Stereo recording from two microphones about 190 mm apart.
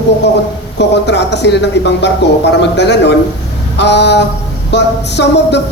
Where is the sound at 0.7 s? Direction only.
65° left (ahead or behind).